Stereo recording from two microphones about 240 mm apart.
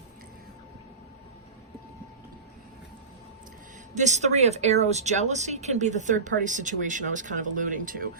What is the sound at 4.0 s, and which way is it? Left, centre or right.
Speech, right.